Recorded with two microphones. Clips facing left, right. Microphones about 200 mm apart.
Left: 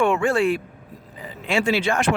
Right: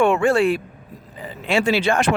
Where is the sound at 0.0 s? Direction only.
30° right (ahead or behind).